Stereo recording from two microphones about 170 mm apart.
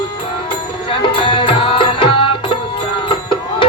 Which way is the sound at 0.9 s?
30° left (ahead or behind).